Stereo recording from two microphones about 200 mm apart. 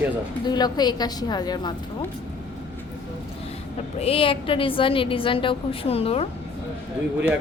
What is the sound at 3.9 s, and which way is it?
A woman's voice, 30° left (ahead or behind).